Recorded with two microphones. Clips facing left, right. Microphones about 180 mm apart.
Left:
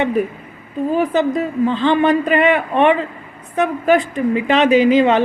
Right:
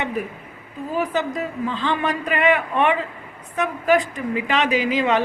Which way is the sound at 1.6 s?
30° left (ahead or behind).